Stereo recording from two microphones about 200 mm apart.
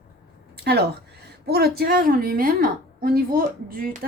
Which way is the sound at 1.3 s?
50° right (ahead or behind).